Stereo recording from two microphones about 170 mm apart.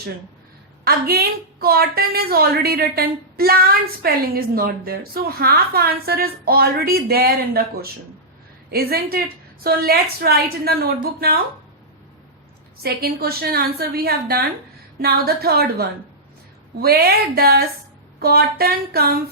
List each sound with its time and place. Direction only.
0.9 s a woman's voice: 65° right (ahead or behind)
12.8 s a woman's voice: 65° right (ahead or behind)